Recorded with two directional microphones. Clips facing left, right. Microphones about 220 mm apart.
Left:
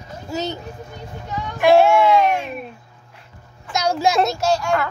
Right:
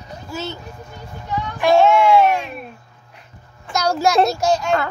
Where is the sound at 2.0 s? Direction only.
20° left (ahead or behind).